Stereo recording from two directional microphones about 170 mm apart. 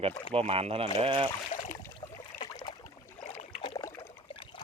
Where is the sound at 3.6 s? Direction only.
25° left (ahead or behind).